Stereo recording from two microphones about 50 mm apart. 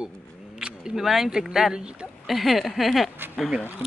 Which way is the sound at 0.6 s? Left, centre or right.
Centre.